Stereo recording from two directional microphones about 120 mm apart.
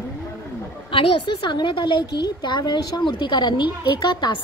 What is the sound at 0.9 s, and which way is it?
A woman's voice, 45° left (ahead or behind).